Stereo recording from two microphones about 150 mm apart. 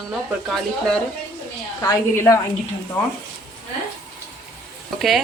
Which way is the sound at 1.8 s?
20° left (ahead or behind).